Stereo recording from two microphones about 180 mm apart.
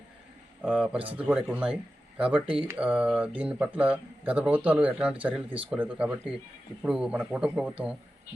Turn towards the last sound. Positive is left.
turn(degrees=-5)  # may be behind; listen again after turning